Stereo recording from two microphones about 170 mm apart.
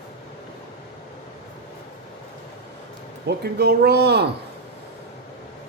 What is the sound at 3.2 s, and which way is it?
Speech, 70° right (ahead or behind).